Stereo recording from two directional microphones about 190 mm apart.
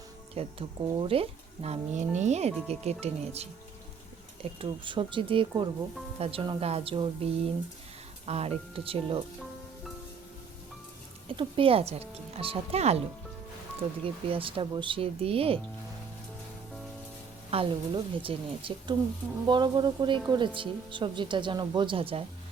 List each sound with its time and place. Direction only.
0.4 s speech: 30° right (ahead or behind)
4.6 s speech: 25° right (ahead or behind)
11.3 s speech: 30° right (ahead or behind)
14.0 s speech: 30° right (ahead or behind)
17.5 s speech: 30° right (ahead or behind)